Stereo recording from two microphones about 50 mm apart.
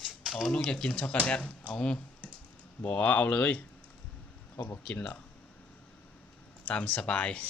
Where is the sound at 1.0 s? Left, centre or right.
Left.